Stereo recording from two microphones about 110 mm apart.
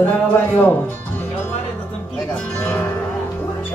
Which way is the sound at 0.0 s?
20° left (ahead or behind).